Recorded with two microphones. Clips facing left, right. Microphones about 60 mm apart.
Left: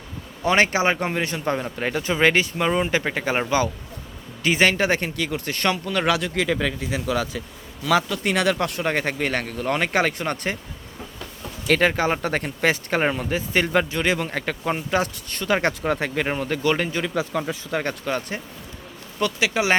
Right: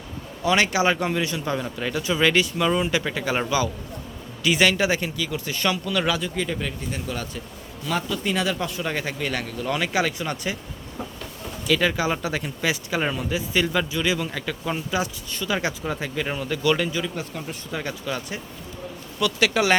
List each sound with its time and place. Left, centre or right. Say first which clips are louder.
0.4 s speech: left 1 dB; left
6.1 s speech: left 4 dB; left
7.9 s speech: left 5 dB; left
11.7 s speech: left 3 dB; left
16.3 s speech: right 2 dB; left
17.3 s speech: left 6 dB; left
17.7 s speech: left 4 dB; left
19.4 s speech: right 2 dB; centre